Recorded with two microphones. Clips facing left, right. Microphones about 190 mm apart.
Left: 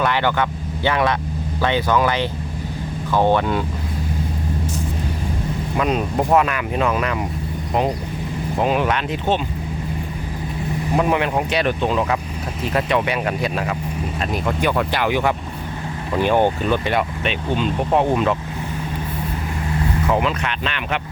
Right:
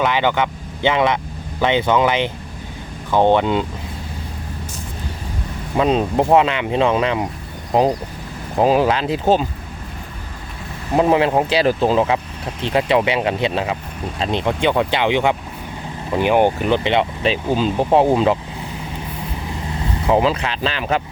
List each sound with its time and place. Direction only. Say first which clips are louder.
0.0 s speech: right 2 dB; 15° right (ahead or behind)
5.7 s speech: right 4 dB; 30° right (ahead or behind)
8.5 s speech: right 5 dB; 35° right (ahead or behind)
10.9 s speech: right 5 dB; 30° right (ahead or behind)
20.1 s speech: right 6 dB; 30° right (ahead or behind)